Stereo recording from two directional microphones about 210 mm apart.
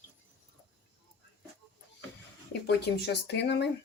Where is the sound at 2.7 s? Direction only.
55° left (ahead or behind).